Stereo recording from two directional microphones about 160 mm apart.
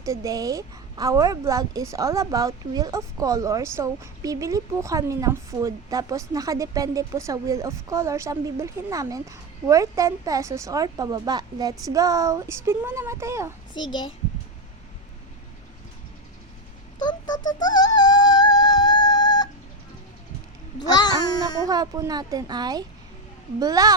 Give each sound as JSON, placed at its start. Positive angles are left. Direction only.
{"t": 0.0, "sound": "a woman's voice", "side_deg": -20}
{"t": 13.7, "sound": "a child's voice", "side_deg": 30}
{"t": 17.0, "sound": "a sound", "side_deg": 25}
{"t": 17.6, "sound": "yodeling", "side_deg": 25}
{"t": 20.7, "sound": "babbling", "side_deg": 25}
{"t": 21.7, "sound": "a woman's voice", "side_deg": -25}